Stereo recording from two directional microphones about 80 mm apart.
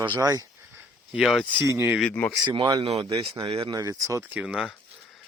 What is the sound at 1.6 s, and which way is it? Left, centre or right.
Speech, right.